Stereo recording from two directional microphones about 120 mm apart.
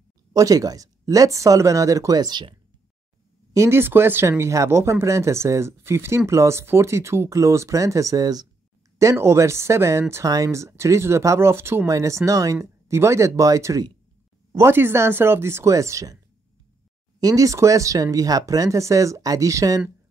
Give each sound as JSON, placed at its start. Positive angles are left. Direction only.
{"t": 0.3, "sound": "speech", "side_deg": -30}
{"t": 3.5, "sound": "speech", "side_deg": -20}
{"t": 17.2, "sound": "speech", "side_deg": -30}